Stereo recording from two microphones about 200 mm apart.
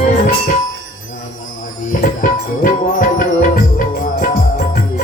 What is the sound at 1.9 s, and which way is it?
Music, 40° left (ahead or behind).